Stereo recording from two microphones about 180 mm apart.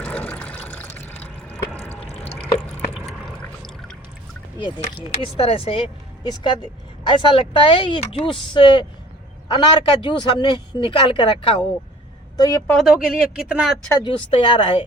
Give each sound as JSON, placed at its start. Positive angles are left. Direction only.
{"t": 0.0, "sound": "water", "side_deg": 10}
{"t": 1.7, "sound": "drip", "side_deg": 35}
{"t": 3.1, "sound": "a sound", "side_deg": 5}
{"t": 4.6, "sound": "a man's voice", "side_deg": 30}
{"t": 12.4, "sound": "speech", "side_deg": 15}
{"t": 12.8, "sound": "speech", "side_deg": -5}
{"t": 14.0, "sound": "a man's voice", "side_deg": 30}